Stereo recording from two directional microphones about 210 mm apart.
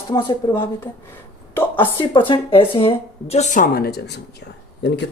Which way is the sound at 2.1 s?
25° left (ahead or behind).